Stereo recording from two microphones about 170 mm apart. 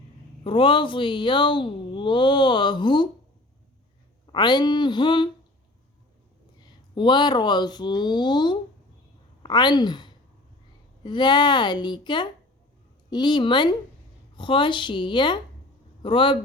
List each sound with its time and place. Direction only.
0.4 s speech: 30° left (ahead or behind)
4.3 s speech: 25° left (ahead or behind)
6.6 s a woman's voice: 25° left (ahead or behind)